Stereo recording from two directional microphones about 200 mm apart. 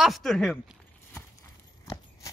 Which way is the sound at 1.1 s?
15° left (ahead or behind).